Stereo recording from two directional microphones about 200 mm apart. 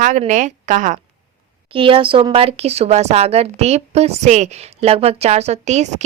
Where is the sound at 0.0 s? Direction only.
40° right (ahead or behind).